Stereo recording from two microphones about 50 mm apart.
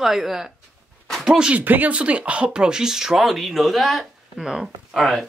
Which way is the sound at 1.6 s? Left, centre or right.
Right.